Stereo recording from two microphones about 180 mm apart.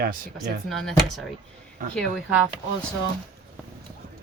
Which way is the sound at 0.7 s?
Centre (ahead or behind).